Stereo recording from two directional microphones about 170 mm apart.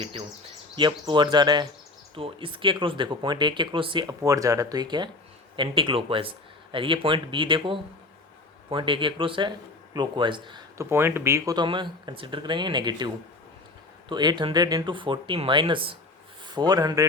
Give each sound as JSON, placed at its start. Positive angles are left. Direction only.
{"t": 0.0, "sound": "speech", "side_deg": -30}
{"t": 10.8, "sound": "speech", "side_deg": -15}
{"t": 14.1, "sound": "speech", "side_deg": -25}